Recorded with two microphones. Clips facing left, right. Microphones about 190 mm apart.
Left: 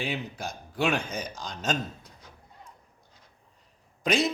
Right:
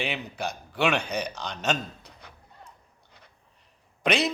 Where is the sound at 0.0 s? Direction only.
65° right (ahead or behind).